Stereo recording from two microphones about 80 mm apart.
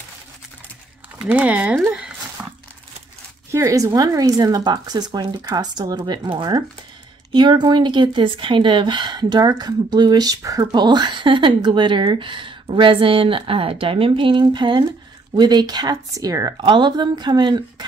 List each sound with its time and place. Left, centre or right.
1.3 s speech: centre
1.9 s a sound: centre
2.4 s crumpling: centre
3.5 s a woman's voice: right
4.4 s speech: right
10.7 s speech: right
15.3 s speech: right
16.6 s a woman's voice: right